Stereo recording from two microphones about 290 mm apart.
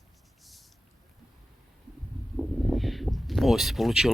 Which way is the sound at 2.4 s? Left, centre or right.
Centre.